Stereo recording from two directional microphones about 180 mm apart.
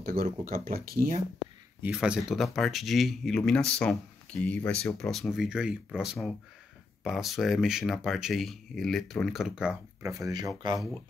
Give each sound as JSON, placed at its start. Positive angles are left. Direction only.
{"t": 0.0, "sound": "speech", "side_deg": -55}
{"t": 1.8, "sound": "speech", "side_deg": -5}
{"t": 10.0, "sound": "speech", "side_deg": -20}